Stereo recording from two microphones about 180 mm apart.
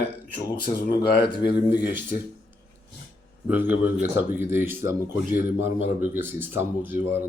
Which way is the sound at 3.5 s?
10° right (ahead or behind).